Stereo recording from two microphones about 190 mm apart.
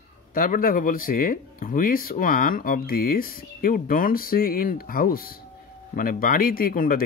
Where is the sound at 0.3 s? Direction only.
45° left (ahead or behind).